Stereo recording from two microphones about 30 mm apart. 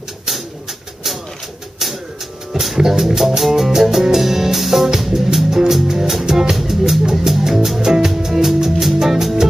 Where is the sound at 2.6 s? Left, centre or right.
Centre.